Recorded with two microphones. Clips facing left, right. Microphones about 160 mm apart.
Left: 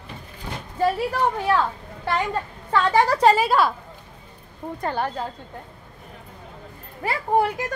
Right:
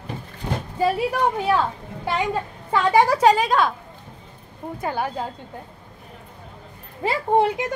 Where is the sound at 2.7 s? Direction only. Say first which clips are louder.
Right 2 dB; 10° right (ahead or behind).